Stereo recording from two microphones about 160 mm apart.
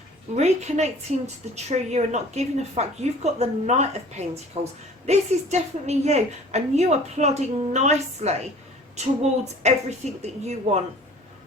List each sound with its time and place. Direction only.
0.3 s a woman's voice: 45° right (ahead or behind)